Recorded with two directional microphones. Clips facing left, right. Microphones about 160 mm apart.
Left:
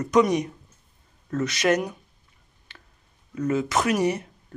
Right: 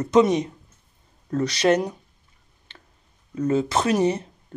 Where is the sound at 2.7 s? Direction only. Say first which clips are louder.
Right 1 dB; 30° right (ahead or behind).